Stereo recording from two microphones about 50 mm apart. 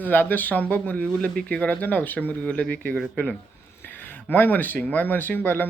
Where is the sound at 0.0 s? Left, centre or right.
Left.